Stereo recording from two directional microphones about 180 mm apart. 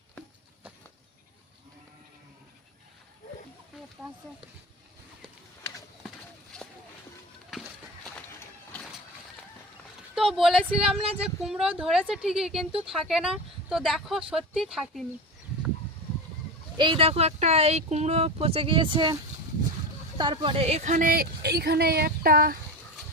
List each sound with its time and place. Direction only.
10.3 s speech: centre (ahead or behind)
16.7 s a woman's voice: 25° right (ahead or behind); by 22.5 s 55° right (ahead or behind)